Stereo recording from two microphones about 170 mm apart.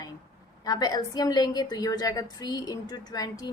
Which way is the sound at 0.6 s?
20° left (ahead or behind).